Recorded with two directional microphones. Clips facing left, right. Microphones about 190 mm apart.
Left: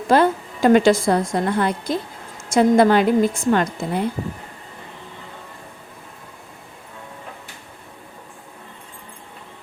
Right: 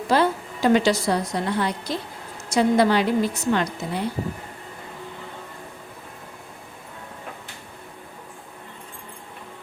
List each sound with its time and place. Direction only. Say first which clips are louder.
0.1 s a woman's voice: left 4 dB; 50° left (ahead or behind)